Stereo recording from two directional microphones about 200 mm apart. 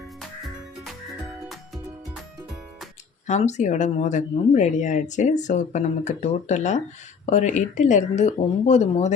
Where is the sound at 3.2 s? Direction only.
35° left (ahead or behind).